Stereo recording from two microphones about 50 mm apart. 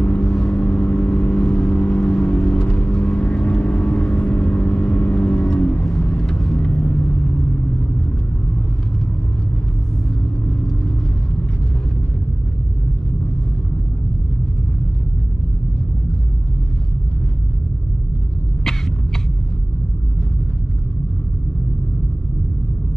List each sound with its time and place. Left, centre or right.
0.0 s vehicle: centre